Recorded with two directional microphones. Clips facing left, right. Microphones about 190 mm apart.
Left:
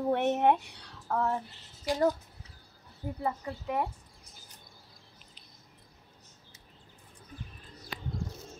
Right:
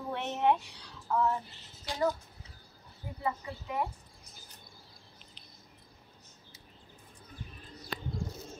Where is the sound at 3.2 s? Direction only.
50° left (ahead or behind).